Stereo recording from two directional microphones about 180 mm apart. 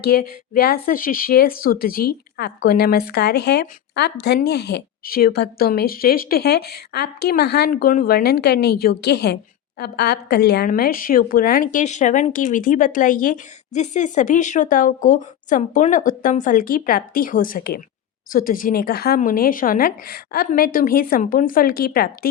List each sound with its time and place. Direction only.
0.0 s a woman's voice: 60° left (ahead or behind)